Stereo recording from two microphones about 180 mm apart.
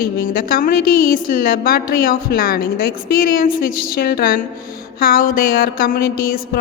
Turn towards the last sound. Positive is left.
turn(degrees=55)  # may be behind; listen again after turning